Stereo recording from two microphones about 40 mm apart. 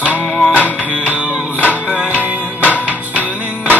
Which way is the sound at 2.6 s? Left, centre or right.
Left.